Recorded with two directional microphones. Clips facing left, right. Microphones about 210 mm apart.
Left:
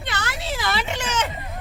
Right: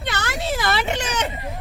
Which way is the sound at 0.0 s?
50° right (ahead or behind).